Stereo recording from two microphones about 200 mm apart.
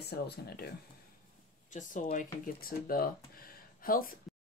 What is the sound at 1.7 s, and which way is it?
Speech, 40° left (ahead or behind).